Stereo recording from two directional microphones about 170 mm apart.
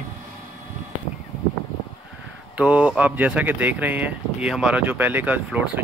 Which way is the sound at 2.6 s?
5° right (ahead or behind).